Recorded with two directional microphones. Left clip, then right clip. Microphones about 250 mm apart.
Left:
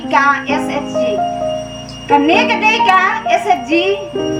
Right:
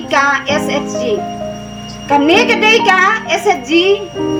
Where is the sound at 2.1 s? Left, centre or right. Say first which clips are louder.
Right 1 dB; right.